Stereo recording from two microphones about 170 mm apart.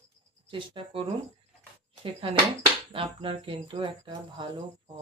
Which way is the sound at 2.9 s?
30° right (ahead or behind).